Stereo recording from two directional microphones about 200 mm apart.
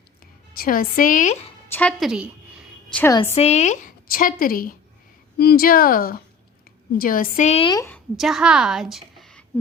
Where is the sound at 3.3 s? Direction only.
35° left (ahead or behind).